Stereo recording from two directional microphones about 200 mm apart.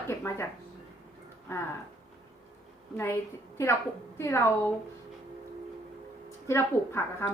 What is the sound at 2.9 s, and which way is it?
A woman's voice, 10° left (ahead or behind).